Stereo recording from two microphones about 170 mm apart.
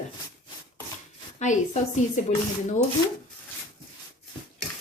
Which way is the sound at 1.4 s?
45° left (ahead or behind).